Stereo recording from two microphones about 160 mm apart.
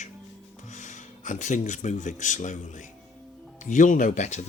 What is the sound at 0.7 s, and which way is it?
Speech, 50° left (ahead or behind).